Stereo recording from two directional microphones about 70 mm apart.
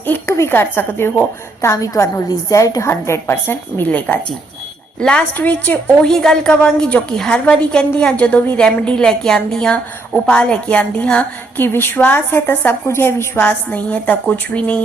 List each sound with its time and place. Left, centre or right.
0.3 s a woman's voice: left
1.6 s a woman's voice: left
2.9 s a woman's voice: left; by 5.2 s centre
5.4 s a woman's voice: left
6.0 s a woman's voice: centre